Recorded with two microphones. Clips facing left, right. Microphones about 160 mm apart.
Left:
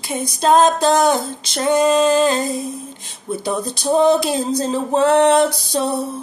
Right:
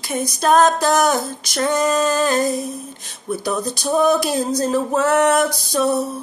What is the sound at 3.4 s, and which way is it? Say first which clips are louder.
Music: left 2 dB; 25° left (ahead or behind).